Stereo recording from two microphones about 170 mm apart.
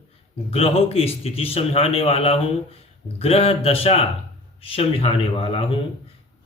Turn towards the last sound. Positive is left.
turn(degrees=30)  # may be behind; listen again after turning